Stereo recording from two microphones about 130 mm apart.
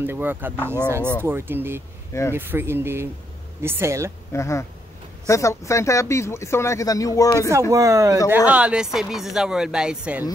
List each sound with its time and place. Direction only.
0.0 s speech: 15° right (ahead or behind)
4.3 s speech: 20° left (ahead or behind)
7.7 s speech: 25° right (ahead or behind)
8.5 s speech: 10° right (ahead or behind)